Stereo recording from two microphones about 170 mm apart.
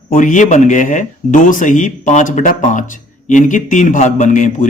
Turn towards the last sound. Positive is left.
turn(degrees=45)  # may be behind; listen again after turning